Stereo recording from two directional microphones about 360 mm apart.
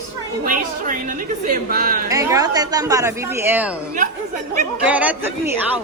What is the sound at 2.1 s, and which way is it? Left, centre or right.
Speech, centre.